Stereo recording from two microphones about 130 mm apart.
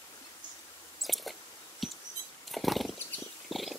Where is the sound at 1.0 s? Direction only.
Centre (ahead or behind).